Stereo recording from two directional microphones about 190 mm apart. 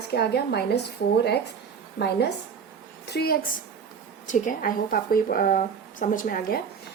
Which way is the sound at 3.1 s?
55° left (ahead or behind).